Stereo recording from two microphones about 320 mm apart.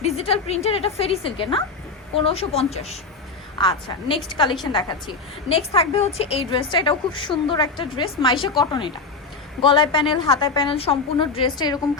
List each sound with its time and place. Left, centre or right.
0.0 s a woman's voice: centre